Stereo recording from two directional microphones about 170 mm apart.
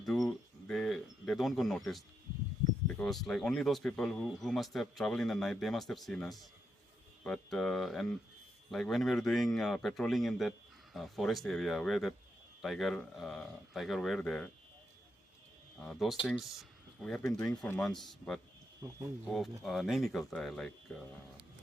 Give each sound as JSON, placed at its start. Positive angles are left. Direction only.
{"t": 0.0, "sound": "bird", "side_deg": 0}
{"t": 2.8, "sound": "speech", "side_deg": 5}
{"t": 15.8, "sound": "speech", "side_deg": 0}
{"t": 16.4, "sound": "a sound", "side_deg": 0}
{"t": 17.2, "sound": "speech", "side_deg": 15}